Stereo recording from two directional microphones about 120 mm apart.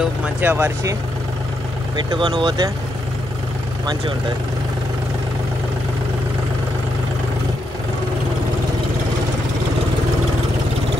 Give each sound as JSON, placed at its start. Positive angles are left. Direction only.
{"t": 0.0, "sound": "speech", "side_deg": -10}
{"t": 2.0, "sound": "speech", "side_deg": -40}